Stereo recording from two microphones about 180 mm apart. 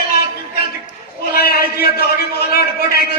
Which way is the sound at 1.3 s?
60° left (ahead or behind).